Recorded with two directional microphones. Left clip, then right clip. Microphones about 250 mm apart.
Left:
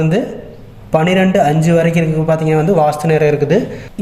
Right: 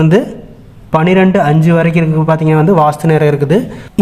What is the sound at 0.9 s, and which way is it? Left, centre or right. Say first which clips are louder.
Speech: right 2 dB; right.